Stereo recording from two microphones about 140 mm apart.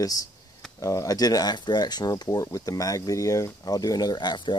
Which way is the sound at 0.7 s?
25° left (ahead or behind).